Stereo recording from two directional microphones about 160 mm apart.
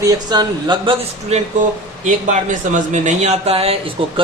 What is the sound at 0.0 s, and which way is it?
Speech, 25° right (ahead or behind).